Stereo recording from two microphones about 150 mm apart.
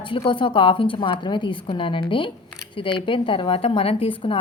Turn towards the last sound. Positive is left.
turn(degrees=35)  # may be behind; listen again after turning